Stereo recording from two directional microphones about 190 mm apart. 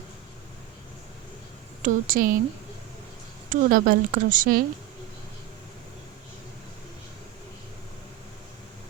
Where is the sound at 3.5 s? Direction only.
45° right (ahead or behind).